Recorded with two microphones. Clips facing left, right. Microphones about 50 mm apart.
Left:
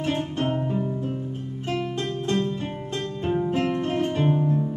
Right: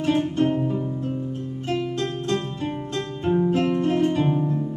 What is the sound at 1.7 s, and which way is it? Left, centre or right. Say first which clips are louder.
Music: right 2 dB; centre.